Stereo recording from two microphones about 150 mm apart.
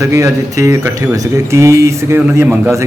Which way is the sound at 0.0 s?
20° right (ahead or behind).